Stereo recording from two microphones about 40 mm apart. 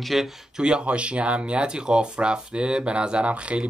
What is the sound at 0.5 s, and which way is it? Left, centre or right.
Speech, right.